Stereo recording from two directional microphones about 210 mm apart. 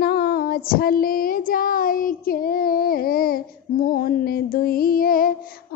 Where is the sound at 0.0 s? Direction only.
50° left (ahead or behind).